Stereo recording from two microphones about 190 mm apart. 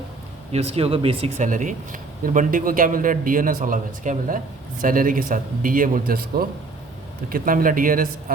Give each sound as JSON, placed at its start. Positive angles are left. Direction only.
{"t": 0.5, "sound": "speech", "side_deg": -30}
{"t": 1.5, "sound": "a man's voice", "side_deg": -45}